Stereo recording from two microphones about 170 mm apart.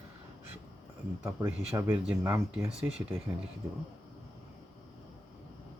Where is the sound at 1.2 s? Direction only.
15° right (ahead or behind).